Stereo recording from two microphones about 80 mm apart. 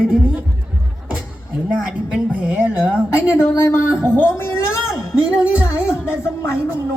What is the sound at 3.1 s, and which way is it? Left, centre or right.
Speech, left.